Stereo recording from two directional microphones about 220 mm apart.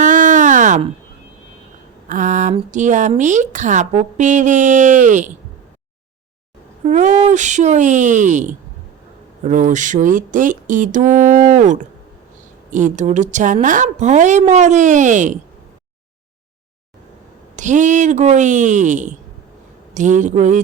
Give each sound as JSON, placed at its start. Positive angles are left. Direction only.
{"t": 0.0, "sound": "a sound", "side_deg": -35}
{"t": 2.0, "sound": "speech", "side_deg": -35}
{"t": 6.8, "sound": "speech", "side_deg": -35}
{"t": 17.6, "sound": "speech", "side_deg": -35}